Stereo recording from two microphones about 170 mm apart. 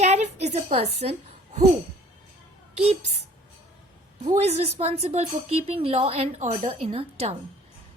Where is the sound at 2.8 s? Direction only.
40° right (ahead or behind).